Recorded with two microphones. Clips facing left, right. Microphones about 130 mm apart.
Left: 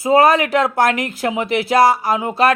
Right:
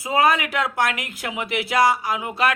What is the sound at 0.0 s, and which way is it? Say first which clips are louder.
Speech: left 7 dB; 35° left (ahead or behind).